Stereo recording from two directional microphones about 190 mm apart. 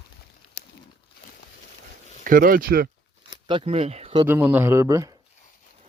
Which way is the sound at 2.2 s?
50° right (ahead or behind).